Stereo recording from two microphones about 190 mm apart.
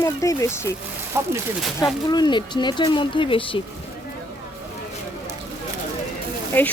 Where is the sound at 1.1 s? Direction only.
15° right (ahead or behind).